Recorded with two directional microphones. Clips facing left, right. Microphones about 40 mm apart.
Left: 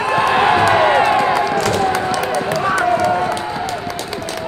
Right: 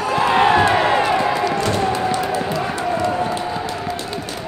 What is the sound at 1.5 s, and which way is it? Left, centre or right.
Run, left.